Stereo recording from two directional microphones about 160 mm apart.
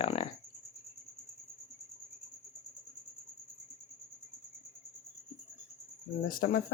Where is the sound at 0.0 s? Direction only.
40° left (ahead or behind).